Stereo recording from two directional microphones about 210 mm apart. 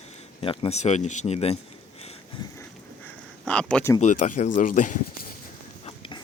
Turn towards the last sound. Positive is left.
turn(degrees=25)  # may be behind; listen again after turning